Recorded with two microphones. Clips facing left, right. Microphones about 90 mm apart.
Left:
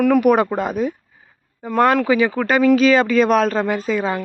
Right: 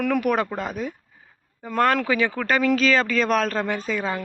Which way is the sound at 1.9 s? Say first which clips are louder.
Left 6 dB; 5° left (ahead or behind).